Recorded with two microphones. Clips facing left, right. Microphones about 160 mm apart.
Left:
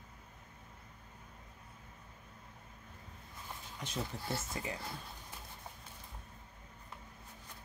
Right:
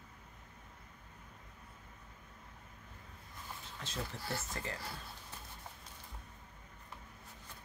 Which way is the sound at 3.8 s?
15° left (ahead or behind).